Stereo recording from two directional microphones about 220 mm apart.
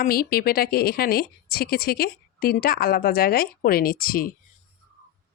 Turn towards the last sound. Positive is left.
turn(degrees=40)  # may be behind; listen again after turning